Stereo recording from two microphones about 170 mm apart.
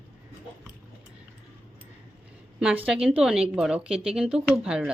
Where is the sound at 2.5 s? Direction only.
5° right (ahead or behind).